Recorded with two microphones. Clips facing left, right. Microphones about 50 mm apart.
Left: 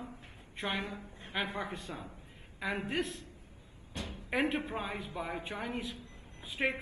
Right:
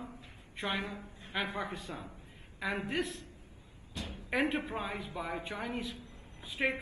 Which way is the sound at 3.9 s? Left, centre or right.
Left.